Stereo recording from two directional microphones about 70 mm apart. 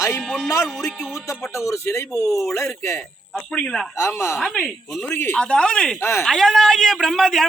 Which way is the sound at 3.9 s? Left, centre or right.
Left.